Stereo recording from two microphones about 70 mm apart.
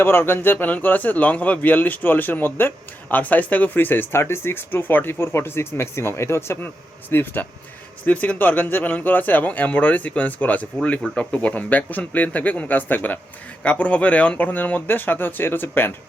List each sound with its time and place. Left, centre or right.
0.0 s speech: left